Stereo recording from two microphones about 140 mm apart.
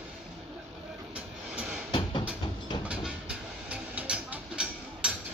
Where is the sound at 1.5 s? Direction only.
5° right (ahead or behind).